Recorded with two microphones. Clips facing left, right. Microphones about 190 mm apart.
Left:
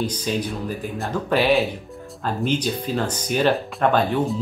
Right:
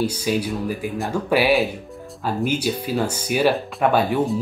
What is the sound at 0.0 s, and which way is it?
Speech, 10° right (ahead or behind).